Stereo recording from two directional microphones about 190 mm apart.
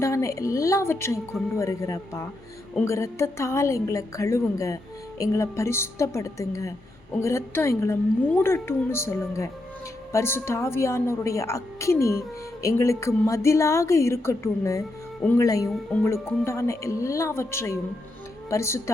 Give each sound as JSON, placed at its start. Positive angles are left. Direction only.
{"t": 0.0, "sound": "a woman's voice", "side_deg": 15}
{"t": 15.7, "sound": "a woman's voice", "side_deg": 5}